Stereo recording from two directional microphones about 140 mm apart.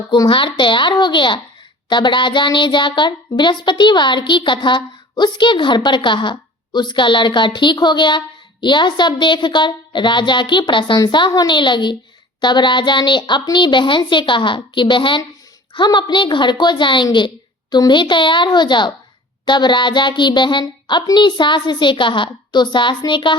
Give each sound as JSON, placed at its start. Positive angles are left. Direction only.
{"t": 0.1, "sound": "speech", "side_deg": 35}